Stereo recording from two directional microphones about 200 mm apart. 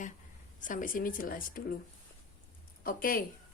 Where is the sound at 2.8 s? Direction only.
45° left (ahead or behind).